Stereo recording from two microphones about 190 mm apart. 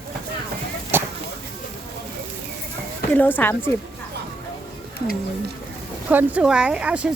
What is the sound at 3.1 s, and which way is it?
Speech, 10° left (ahead or behind).